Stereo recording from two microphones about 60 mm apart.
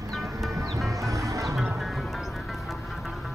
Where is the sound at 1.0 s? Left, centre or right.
Right.